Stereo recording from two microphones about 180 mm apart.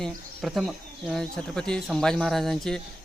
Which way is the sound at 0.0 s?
Centre (ahead or behind).